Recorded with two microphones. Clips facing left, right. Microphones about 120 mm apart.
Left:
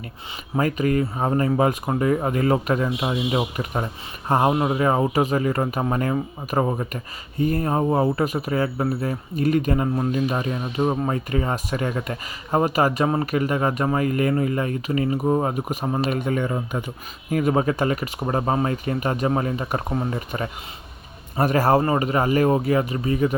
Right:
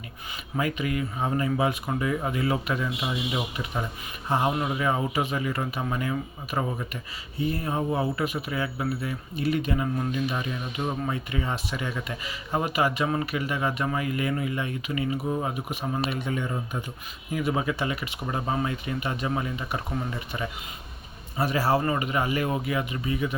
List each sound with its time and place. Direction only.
0.5 s speech: 40° left (ahead or behind)